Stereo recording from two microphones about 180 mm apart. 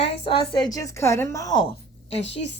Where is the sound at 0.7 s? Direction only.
15° left (ahead or behind).